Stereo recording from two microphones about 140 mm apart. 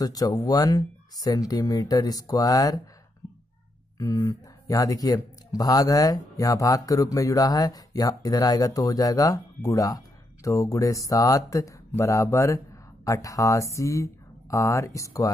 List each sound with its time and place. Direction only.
0.0 s speech: 25° left (ahead or behind)
4.0 s speech: 20° left (ahead or behind)